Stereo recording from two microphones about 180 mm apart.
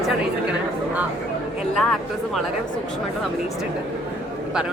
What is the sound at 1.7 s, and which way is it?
Speech, centre (ahead or behind).